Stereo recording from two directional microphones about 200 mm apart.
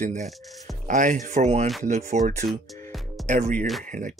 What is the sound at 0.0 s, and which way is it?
Speech, 40° right (ahead or behind).